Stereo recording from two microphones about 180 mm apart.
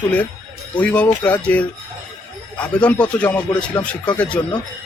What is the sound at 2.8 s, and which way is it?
Speech, 5° left (ahead or behind).